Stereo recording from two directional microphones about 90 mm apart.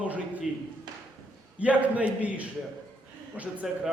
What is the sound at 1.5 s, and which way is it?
A man's voice, 15° right (ahead or behind).